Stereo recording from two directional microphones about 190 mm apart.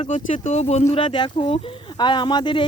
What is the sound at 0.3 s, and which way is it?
Speech, 35° left (ahead or behind).